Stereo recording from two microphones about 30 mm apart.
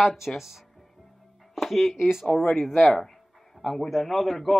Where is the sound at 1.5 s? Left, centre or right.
Centre.